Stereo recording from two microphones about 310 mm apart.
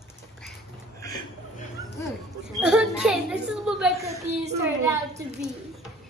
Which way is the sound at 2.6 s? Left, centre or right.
Centre.